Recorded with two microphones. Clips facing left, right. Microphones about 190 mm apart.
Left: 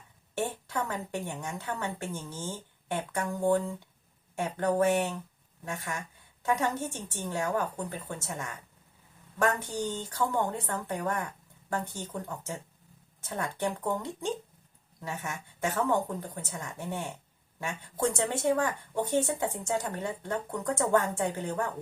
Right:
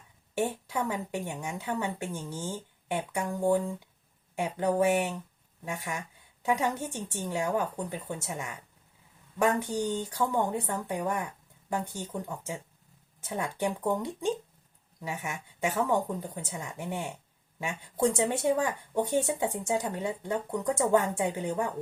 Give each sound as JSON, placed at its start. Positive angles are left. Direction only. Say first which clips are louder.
{"t": 0.3, "sound": "speech", "louder": "right 2 dB", "side_deg": -15}